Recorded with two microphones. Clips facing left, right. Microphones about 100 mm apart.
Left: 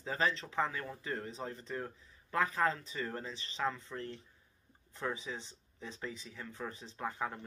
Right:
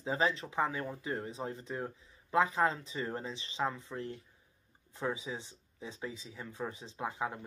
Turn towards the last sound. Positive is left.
turn(degrees=-10)  # may be behind; listen again after turning